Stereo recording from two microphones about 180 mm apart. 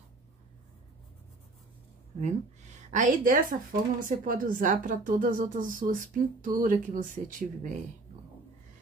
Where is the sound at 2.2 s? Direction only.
40° right (ahead or behind).